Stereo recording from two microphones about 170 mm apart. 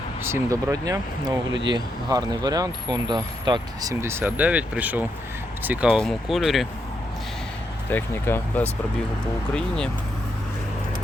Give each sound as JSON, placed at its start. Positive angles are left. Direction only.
{"t": 0.2, "sound": "speech", "side_deg": -15}
{"t": 7.9, "sound": "speech", "side_deg": 10}